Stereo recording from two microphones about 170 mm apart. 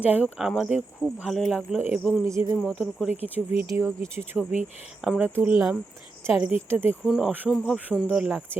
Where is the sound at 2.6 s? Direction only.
Centre (ahead or behind).